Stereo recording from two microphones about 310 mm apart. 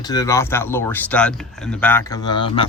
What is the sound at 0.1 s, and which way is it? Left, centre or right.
Speech, centre.